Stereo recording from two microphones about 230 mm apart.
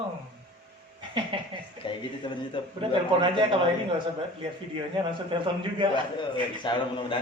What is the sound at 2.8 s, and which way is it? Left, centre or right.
Speech, right.